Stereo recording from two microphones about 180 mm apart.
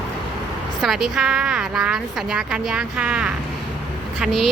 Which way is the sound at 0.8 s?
Centre (ahead or behind).